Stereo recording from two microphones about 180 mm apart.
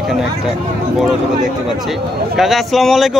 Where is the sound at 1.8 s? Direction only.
Centre (ahead or behind).